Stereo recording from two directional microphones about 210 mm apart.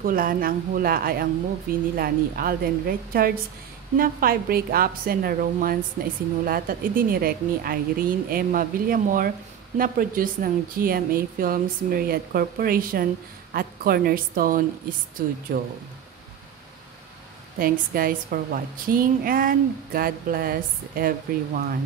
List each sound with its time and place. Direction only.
0.0 s speech: 40° right (ahead or behind)
17.6 s speech: 45° right (ahead or behind)